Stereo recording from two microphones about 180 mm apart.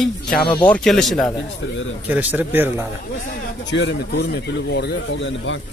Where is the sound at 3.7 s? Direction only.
75° left (ahead or behind).